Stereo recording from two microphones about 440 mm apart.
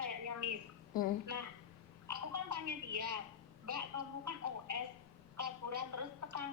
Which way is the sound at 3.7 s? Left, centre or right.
Right.